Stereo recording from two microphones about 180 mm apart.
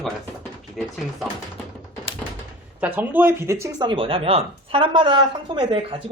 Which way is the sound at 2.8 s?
10° right (ahead or behind).